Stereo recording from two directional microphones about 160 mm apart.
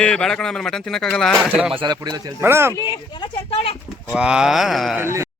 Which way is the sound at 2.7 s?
25° left (ahead or behind).